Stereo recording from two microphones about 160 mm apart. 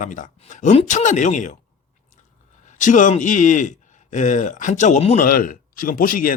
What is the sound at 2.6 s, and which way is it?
A man's voice, 50° left (ahead or behind).